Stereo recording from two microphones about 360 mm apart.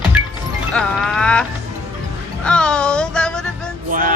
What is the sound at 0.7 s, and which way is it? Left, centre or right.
Music, centre.